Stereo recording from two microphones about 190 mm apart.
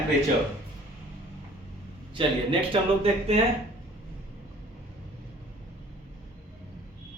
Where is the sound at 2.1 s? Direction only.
25° right (ahead or behind).